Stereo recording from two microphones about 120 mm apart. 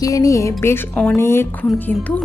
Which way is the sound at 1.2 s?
20° left (ahead or behind).